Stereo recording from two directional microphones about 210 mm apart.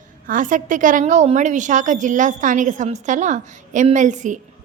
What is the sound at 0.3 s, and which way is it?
A woman's voice, 40° right (ahead or behind).